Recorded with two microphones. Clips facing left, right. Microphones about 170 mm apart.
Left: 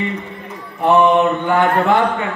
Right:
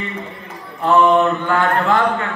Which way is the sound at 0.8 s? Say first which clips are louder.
Left 1 dB; 20° left (ahead or behind).